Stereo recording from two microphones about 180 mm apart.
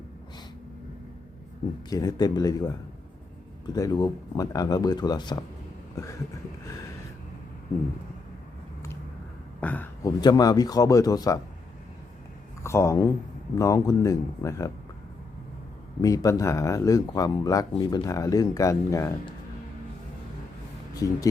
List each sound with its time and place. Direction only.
1.9 s speech: 20° left (ahead or behind)
3.8 s speech: 20° left (ahead or behind)
9.6 s speech: 10° left (ahead or behind)
12.6 s speech: 15° left (ahead or behind)
16.0 s speech: 20° left (ahead or behind)
20.9 s speech: 20° left (ahead or behind)